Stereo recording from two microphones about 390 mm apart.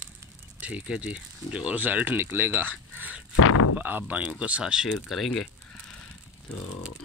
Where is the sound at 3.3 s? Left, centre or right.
Left.